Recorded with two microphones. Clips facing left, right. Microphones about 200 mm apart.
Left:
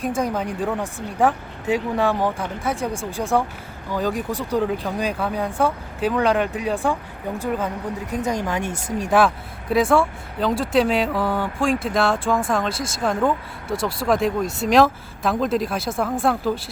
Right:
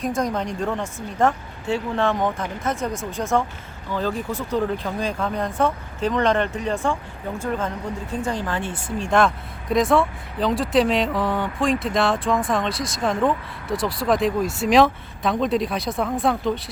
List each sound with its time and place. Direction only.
0.2 s speech: 5° left (ahead or behind)
2.9 s speech: 30° left (ahead or behind)
3.2 s speech: 15° left (ahead or behind)